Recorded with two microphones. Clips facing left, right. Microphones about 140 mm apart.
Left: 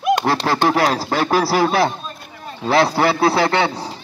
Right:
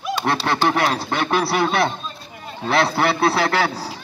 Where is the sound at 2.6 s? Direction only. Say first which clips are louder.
Left 3 dB; 30° left (ahead or behind).